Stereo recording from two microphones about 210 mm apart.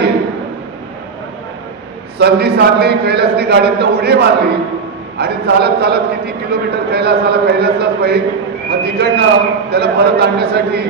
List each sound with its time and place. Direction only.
2.1 s a man's voice: 50° right (ahead or behind)